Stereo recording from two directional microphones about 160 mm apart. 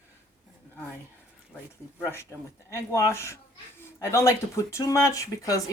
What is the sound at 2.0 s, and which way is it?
Speech, 15° left (ahead or behind).